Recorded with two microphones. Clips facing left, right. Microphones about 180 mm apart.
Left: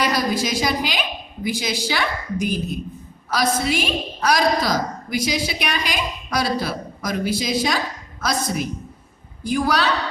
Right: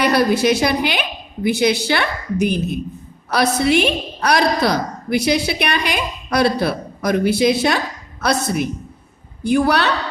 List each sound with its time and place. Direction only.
0.0 s a woman's voice: 65° right (ahead or behind)